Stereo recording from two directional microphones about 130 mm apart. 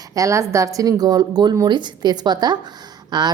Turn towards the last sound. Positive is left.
turn(degrees=-35)  # may be behind; listen again after turning